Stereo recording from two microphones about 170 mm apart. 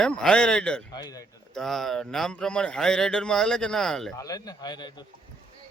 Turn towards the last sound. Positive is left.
turn(degrees=25)  # may be behind; listen again after turning